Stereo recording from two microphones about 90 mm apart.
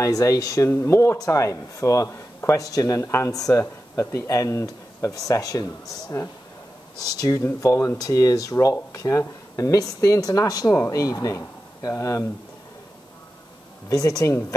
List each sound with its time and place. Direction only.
0.0 s speech: 40° left (ahead or behind)
7.0 s speech: 45° left (ahead or behind)
13.8 s speech: 40° left (ahead or behind)